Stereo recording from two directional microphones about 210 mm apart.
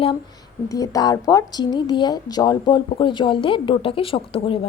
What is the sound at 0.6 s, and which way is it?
Speech, 15° left (ahead or behind).